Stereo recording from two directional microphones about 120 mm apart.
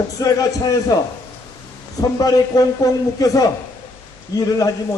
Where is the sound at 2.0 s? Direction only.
30° left (ahead or behind).